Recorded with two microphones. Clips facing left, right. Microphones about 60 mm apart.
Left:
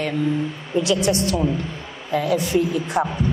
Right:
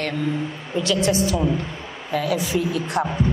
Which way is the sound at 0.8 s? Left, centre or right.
Centre.